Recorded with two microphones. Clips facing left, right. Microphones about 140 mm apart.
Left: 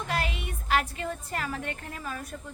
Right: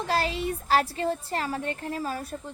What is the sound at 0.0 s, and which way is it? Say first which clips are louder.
A woman's voice: right 5 dB; 30° right (ahead or behind).